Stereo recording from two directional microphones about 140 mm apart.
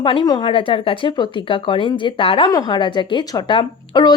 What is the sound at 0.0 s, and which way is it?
Speech, 35° left (ahead or behind).